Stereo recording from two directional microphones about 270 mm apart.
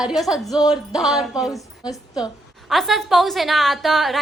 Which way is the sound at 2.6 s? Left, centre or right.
Centre.